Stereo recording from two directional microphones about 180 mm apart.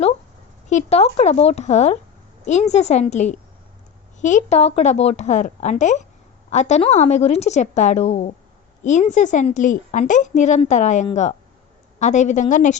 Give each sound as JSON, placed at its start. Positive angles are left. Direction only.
{"t": 0.7, "sound": "a woman's voice", "side_deg": 40}